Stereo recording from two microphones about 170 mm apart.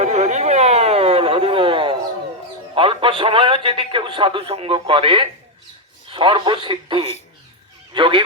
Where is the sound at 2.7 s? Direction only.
30° right (ahead or behind).